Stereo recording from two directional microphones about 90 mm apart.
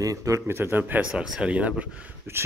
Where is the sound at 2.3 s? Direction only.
30° right (ahead or behind).